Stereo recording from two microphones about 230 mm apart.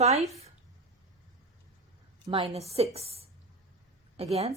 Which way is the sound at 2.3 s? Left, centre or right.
Right.